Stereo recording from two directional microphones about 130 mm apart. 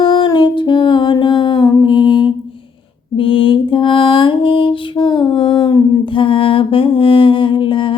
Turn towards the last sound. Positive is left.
turn(degrees=40)  # may be behind; listen again after turning